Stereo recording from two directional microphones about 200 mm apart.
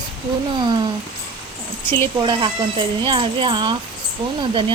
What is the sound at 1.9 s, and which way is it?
Speech, 25° right (ahead or behind).